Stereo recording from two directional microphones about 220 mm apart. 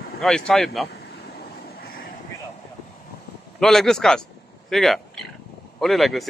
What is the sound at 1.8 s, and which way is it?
Vehicle, 40° left (ahead or behind).